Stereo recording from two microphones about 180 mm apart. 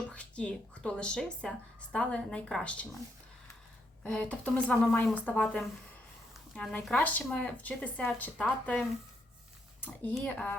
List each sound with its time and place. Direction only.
0.1 s speech: 5° left (ahead or behind)
4.0 s speech: 5° left (ahead or behind)